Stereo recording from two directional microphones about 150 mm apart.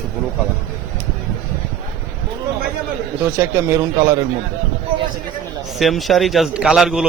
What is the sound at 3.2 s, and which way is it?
A man's voice, 15° right (ahead or behind).